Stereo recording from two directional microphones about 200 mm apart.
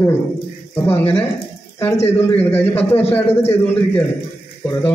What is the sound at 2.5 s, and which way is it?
Speech, 30° left (ahead or behind).